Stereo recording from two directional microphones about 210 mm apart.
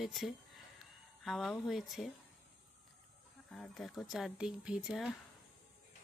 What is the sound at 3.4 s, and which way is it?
Speech, 5° left (ahead or behind).